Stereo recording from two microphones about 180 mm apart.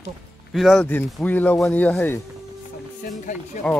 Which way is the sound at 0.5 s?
Centre (ahead or behind).